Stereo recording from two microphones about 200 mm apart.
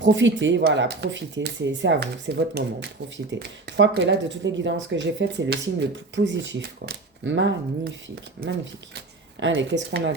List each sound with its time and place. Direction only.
0.0 s speech: 65° right (ahead or behind)